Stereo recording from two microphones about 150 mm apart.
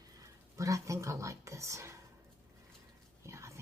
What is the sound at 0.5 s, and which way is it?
Speech, 20° right (ahead or behind).